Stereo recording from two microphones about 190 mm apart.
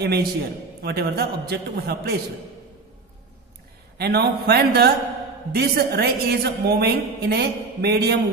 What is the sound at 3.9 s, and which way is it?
A woman's voice, 55° right (ahead or behind).